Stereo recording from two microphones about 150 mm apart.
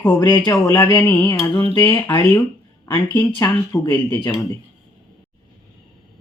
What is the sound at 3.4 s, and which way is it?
Speech, 15° left (ahead or behind).